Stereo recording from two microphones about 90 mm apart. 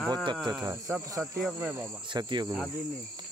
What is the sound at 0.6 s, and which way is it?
Speech, 40° right (ahead or behind).